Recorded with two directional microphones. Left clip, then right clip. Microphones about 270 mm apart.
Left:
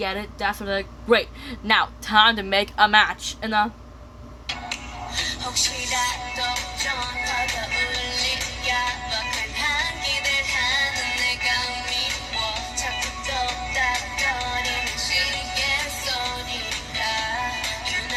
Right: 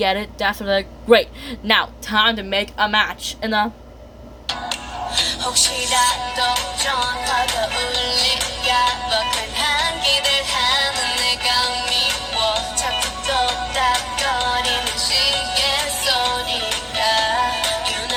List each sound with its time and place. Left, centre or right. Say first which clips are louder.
0.0 s speech: right 6 dB; centre
4.4 s music: right 5 dB; right